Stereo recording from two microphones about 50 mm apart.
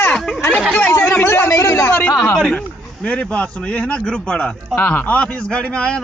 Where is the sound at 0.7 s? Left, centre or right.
Left.